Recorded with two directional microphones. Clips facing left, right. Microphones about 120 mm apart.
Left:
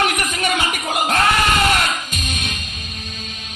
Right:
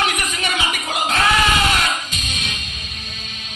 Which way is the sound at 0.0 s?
50° left (ahead or behind).